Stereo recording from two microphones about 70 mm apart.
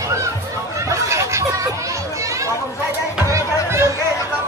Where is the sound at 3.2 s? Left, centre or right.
Right.